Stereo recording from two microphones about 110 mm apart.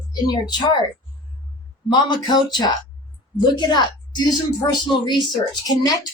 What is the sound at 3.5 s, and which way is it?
A woman's voice, 40° left (ahead or behind).